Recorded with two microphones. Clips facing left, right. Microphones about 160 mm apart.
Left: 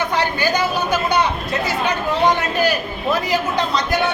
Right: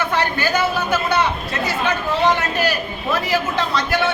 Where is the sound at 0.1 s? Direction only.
15° left (ahead or behind).